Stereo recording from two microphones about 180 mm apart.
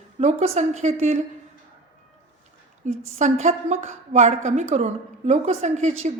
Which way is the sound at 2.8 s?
40° right (ahead or behind).